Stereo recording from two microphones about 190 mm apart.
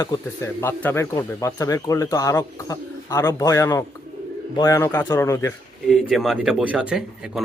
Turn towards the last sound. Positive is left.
turn(degrees=-5)  # may be behind; listen again after turning